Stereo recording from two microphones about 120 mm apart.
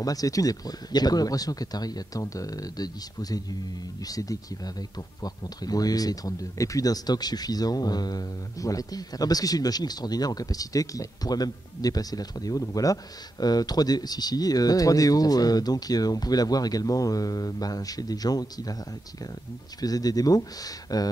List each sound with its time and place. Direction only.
0.0 s speech: 30° left (ahead or behind)
19.8 s speech: 30° left (ahead or behind)